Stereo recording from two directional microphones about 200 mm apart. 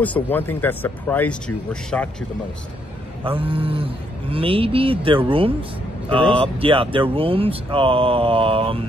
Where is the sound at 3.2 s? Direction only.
25° right (ahead or behind).